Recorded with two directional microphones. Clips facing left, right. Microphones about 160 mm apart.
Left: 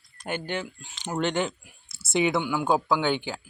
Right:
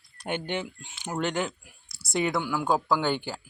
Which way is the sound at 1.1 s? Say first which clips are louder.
Left 2 dB; centre (ahead or behind).